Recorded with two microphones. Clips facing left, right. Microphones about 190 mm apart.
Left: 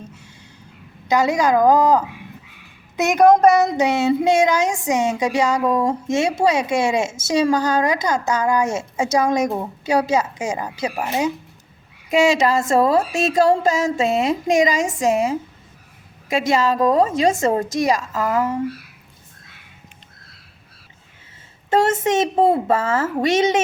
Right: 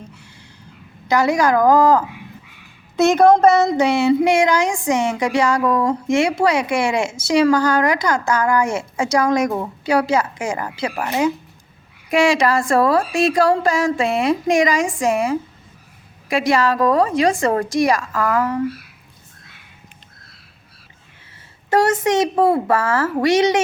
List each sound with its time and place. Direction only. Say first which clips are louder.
1.0 s speech: right 1 dB; 20° left (ahead or behind)
12.1 s speech: even; 20° left (ahead or behind)
16.5 s speech: right 1 dB; 20° left (ahead or behind)
21.7 s speech: right 1 dB; 25° left (ahead or behind)